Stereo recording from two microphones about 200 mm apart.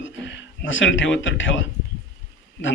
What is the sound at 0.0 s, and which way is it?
A man's voice, 65° left (ahead or behind).